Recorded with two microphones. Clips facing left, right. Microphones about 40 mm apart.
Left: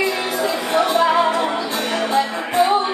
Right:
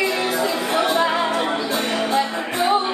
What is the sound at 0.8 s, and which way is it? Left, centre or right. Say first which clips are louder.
Music: left 3 dB; centre.